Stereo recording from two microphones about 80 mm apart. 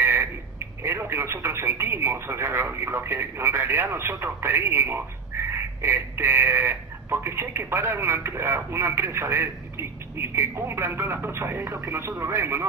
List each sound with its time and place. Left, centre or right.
0.0 s telephone: right
0.8 s speech: right